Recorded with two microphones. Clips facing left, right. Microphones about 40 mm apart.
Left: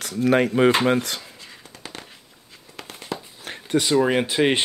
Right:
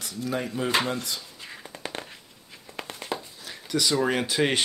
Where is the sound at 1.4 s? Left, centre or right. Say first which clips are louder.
Right 3 dB; centre.